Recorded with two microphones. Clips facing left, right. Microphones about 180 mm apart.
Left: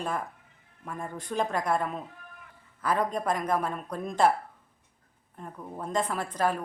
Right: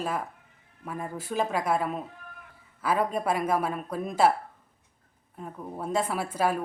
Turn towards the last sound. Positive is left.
turn(degrees=-10)  # may be behind; listen again after turning